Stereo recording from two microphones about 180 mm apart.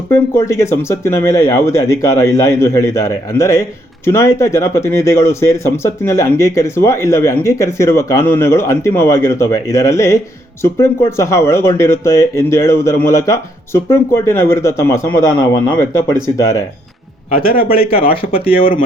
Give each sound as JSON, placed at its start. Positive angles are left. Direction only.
{"t": 0.1, "sound": "speech", "side_deg": 15}
{"t": 17.6, "sound": "speech", "side_deg": 55}
{"t": 17.8, "sound": "speech", "side_deg": 30}
{"t": 18.6, "sound": "speech", "side_deg": 50}